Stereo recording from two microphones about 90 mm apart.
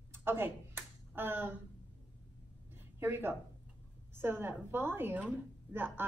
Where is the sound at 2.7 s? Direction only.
25° right (ahead or behind).